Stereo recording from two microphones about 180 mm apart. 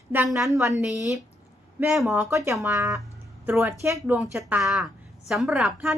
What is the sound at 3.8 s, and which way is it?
A woman's voice, 15° right (ahead or behind).